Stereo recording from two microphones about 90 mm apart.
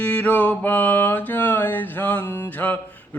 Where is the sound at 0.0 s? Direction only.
15° left (ahead or behind).